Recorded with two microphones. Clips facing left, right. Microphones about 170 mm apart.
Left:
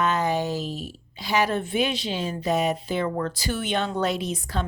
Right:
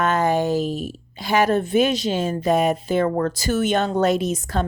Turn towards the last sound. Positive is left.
turn(degrees=-45)  # may be behind; listen again after turning